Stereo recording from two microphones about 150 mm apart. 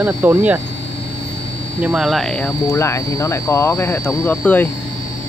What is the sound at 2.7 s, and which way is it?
Speech, 20° left (ahead or behind).